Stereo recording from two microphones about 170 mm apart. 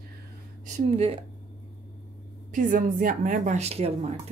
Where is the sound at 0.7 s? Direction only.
35° right (ahead or behind).